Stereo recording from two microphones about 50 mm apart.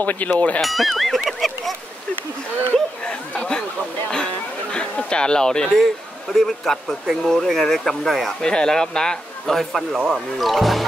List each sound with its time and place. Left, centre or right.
0.0 s speech: left
0.6 s speech: centre
3.1 s speech: centre
4.7 s speech: centre
8.4 s speech: centre